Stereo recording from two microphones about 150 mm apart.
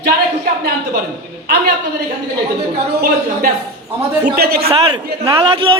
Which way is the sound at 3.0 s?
85° right.